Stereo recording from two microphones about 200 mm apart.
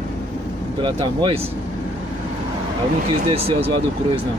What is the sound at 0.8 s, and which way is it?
Speech, 25° right (ahead or behind).